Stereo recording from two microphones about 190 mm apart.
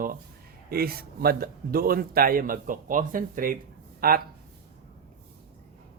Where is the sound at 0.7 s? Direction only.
55° right (ahead or behind).